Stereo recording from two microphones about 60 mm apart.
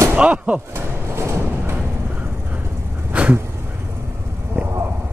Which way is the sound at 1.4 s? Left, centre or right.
Right.